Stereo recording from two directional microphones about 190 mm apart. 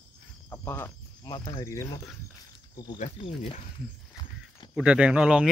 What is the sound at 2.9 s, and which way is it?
Speech, 30° left (ahead or behind).